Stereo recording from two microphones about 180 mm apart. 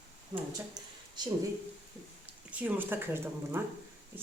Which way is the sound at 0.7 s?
25° right (ahead or behind).